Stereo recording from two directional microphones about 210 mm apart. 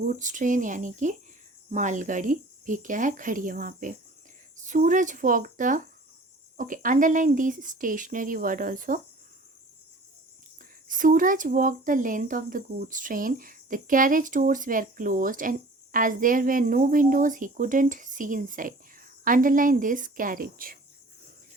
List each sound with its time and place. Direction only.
0.0 s speech: 40° right (ahead or behind)
10.8 s speech: 40° right (ahead or behind)